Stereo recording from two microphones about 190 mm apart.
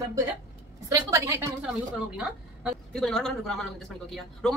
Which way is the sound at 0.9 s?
15° right (ahead or behind).